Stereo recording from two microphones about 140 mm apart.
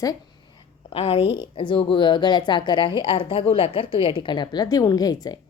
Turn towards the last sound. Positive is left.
turn(degrees=30)  # may be behind; listen again after turning